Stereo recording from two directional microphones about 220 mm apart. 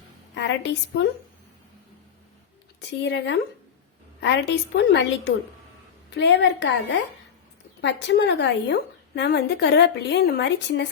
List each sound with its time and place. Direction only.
0.3 s a woman's voice: 50° left (ahead or behind)
2.8 s a woman's voice: 55° left (ahead or behind)